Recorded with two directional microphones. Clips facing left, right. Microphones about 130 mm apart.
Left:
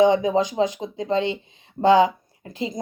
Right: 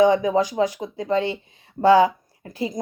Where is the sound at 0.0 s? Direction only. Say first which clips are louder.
Even; 20° left (ahead or behind).